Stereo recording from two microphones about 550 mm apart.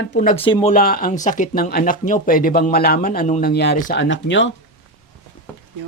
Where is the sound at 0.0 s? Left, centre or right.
Centre.